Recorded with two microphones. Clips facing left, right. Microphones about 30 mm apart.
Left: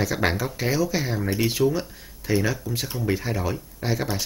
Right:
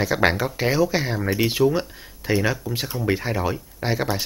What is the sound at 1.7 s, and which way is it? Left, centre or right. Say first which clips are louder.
Speech: right 3 dB; right.